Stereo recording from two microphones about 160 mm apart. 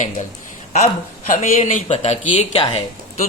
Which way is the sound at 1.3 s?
50° left (ahead or behind).